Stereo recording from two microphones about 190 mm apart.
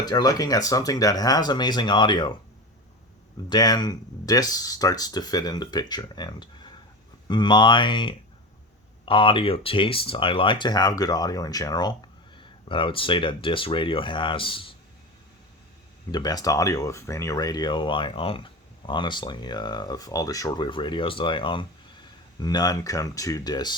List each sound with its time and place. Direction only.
0.0 s speech: 20° left (ahead or behind)
3.5 s speech: 20° left (ahead or behind)
16.1 s speech: 20° left (ahead or behind)